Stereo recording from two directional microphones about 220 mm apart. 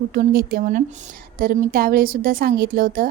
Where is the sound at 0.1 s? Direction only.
45° right (ahead or behind).